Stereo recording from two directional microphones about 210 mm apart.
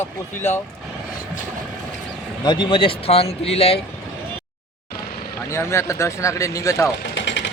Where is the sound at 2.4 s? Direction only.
20° left (ahead or behind).